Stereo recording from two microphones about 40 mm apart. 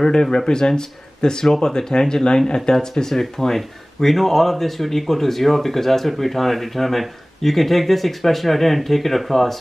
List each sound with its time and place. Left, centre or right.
0.0 s speech: centre